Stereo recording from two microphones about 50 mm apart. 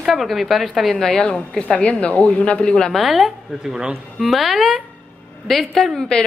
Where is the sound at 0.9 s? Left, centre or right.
Centre.